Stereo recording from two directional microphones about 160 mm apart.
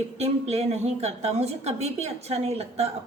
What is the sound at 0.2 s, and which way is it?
A woman's voice, 40° right (ahead or behind).